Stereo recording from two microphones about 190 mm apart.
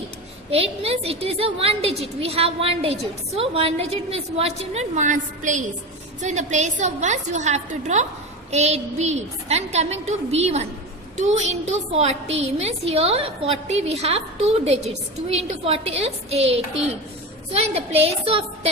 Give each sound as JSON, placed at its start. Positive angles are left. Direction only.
{"t": 0.5, "sound": "a woman's voice", "side_deg": -30}